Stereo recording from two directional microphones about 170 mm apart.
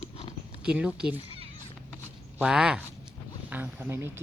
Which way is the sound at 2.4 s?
5° right (ahead or behind).